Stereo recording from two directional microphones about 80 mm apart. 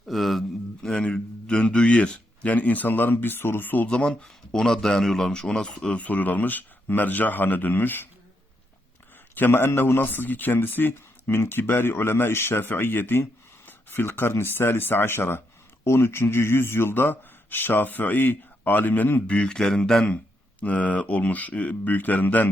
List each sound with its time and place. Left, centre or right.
0.1 s a man's voice: centre; by 3.8 s left
3.8 s speech: centre
6.0 s speech: centre
9.3 s speech: left
19.4 s speech: centre